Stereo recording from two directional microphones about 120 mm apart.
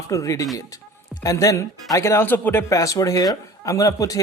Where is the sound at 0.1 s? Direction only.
25° left (ahead or behind).